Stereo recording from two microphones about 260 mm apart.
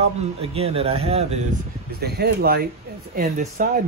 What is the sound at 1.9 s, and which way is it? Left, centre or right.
Speech, right.